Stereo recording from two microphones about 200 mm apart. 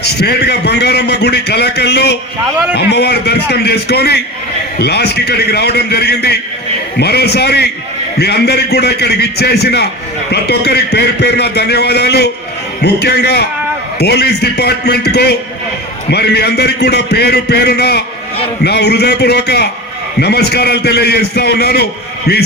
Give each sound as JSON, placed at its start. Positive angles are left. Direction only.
{"t": 0.0, "sound": "a man's voice", "side_deg": 55}